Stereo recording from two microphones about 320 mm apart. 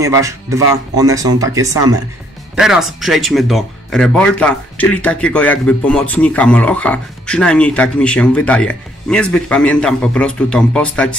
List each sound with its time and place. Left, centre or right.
0.0 s speech: centre